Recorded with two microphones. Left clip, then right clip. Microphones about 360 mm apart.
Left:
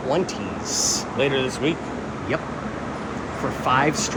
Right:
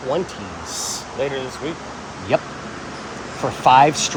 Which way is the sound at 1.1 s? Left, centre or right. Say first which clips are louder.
Left 1 dB; left.